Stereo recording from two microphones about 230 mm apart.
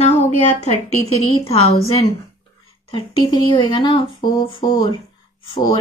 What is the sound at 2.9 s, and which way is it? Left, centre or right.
Speech, left.